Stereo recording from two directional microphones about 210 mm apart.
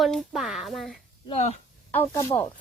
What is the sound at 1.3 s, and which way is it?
Speech, 35° left (ahead or behind).